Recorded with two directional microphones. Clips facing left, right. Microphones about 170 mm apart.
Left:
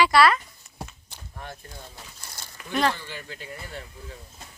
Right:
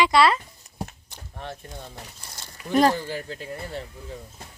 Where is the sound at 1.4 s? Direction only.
25° right (ahead or behind).